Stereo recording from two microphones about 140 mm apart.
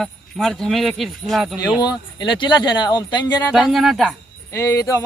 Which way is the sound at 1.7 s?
30° left (ahead or behind).